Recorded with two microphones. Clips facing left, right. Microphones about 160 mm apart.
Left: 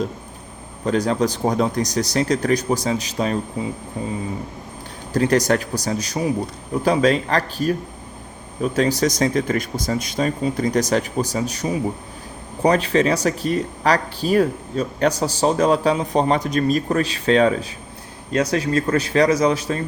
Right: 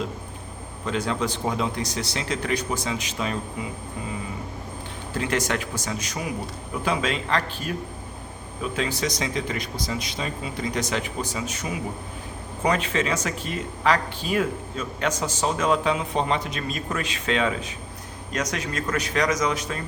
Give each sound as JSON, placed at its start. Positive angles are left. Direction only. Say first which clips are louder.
{"t": 0.9, "sound": "speech", "louder": "left 7 dB", "side_deg": 40}
{"t": 5.1, "sound": "speech", "louder": "left 8 dB", "side_deg": 40}